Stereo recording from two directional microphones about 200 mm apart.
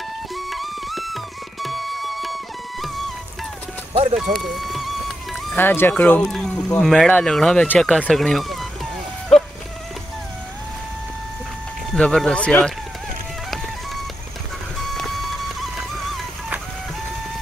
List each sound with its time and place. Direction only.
0.5 s music: centre (ahead or behind)
3.9 s vehicle: 30° right (ahead or behind)
4.2 s speech: centre (ahead or behind)
11.9 s speech: 5° left (ahead or behind)